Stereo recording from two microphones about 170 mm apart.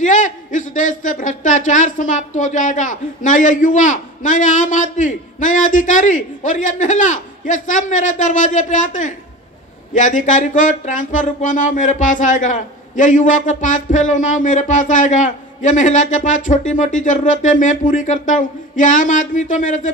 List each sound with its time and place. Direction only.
0.0 s speech: 50° left (ahead or behind)